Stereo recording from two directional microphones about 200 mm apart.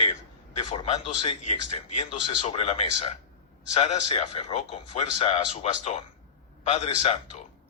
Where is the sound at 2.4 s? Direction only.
30° left (ahead or behind).